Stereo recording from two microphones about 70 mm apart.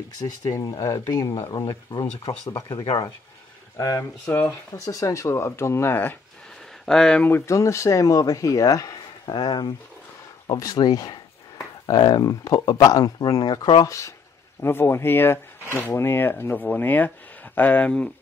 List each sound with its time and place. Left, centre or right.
0.5 s speech: left
3.7 s speech: left
6.9 s speech: centre
7.2 s speech: left
7.5 s speech: left
10.4 s speech: left
14.6 s speech: left; by 18.1 s centre